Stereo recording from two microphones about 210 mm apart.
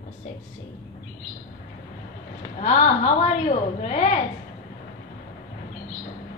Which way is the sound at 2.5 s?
35° left (ahead or behind).